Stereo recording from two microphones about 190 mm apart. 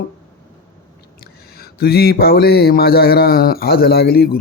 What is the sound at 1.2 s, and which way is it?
Speech, 55° left (ahead or behind).